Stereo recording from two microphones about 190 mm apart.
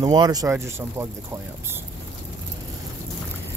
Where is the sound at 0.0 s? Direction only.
20° right (ahead or behind).